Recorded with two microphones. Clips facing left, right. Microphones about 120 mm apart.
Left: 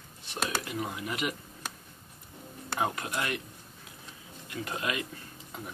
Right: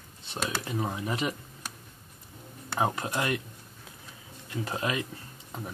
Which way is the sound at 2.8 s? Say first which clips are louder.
Right 3 dB; 30° right (ahead or behind).